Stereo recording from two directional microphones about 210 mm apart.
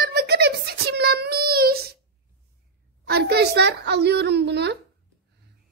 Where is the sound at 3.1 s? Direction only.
50° right (ahead or behind).